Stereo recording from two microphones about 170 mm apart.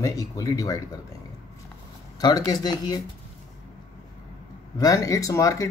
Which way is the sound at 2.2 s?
25° left (ahead or behind).